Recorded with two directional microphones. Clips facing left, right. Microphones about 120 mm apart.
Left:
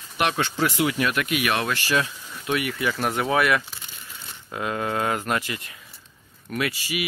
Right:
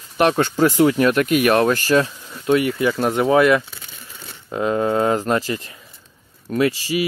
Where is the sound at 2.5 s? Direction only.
25° right (ahead or behind).